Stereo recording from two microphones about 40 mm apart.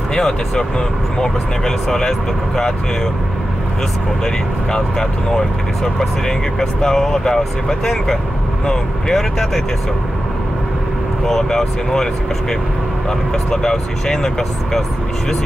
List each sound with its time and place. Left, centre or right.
0.1 s speech: centre
4.7 s speech: centre
11.2 s speech: centre